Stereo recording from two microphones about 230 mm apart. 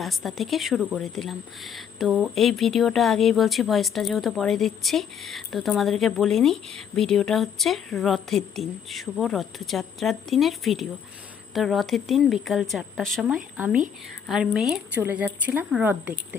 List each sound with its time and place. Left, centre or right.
0.0 s a woman's voice: centre